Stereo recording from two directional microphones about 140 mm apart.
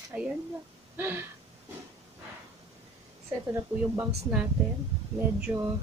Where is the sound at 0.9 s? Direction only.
15° right (ahead or behind).